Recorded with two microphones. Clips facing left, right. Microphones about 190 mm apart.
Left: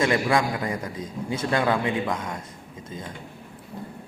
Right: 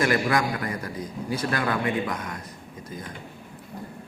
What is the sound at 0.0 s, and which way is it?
A man's voice, 25° left (ahead or behind).